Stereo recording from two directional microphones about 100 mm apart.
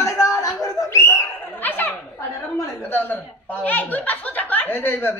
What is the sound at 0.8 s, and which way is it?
Bird, 25° left (ahead or behind).